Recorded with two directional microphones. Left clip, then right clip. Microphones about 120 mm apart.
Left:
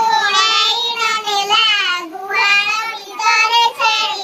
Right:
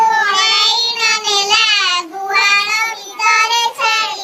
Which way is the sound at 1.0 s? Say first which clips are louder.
Right 2 dB; 50° right (ahead or behind).